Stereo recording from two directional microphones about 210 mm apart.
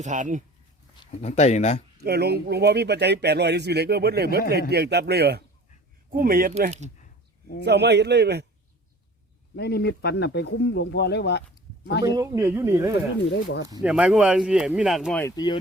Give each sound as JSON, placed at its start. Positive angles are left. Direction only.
{"t": 0.0, "sound": "speech", "side_deg": -35}
{"t": 0.9, "sound": "speech", "side_deg": 30}
{"t": 2.0, "sound": "speech", "side_deg": -50}
{"t": 6.6, "sound": "speech", "side_deg": -35}
{"t": 7.0, "sound": "a sound", "side_deg": 45}
{"t": 7.6, "sound": "speech", "side_deg": -55}
{"t": 9.6, "sound": "speech", "side_deg": 50}
{"t": 12.0, "sound": "speech", "side_deg": -15}
{"t": 15.2, "sound": "speech", "side_deg": 20}